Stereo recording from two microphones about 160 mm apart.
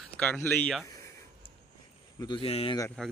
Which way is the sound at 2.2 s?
30° left (ahead or behind).